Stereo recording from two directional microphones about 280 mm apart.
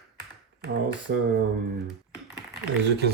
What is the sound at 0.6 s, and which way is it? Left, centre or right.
Speech, right.